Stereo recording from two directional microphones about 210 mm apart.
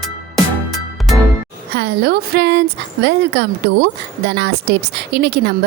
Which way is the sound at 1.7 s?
50° right (ahead or behind).